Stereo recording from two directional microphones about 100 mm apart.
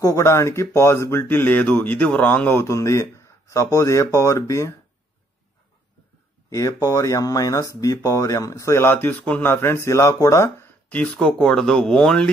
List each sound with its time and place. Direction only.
0.0 s speech: 30° left (ahead or behind)
6.5 s speech: 35° left (ahead or behind)
10.9 s speech: 10° left (ahead or behind)